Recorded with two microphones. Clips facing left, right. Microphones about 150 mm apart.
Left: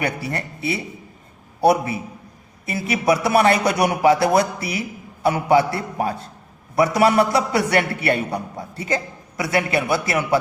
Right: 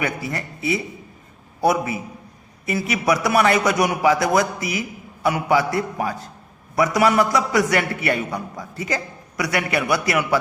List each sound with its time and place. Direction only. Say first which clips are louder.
0.0 s a man's voice: left 1 dB; 35° left (ahead or behind)